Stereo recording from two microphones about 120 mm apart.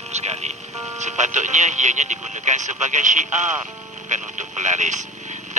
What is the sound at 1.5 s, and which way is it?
Speech, 90° right.